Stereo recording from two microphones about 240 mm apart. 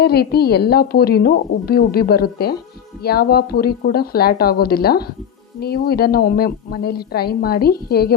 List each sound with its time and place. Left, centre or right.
0.0 s a woman's voice: left